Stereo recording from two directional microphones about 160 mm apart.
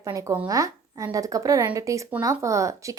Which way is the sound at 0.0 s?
20° right (ahead or behind).